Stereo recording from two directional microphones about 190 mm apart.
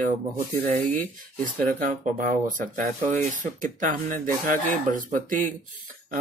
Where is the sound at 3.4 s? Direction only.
45° right (ahead or behind).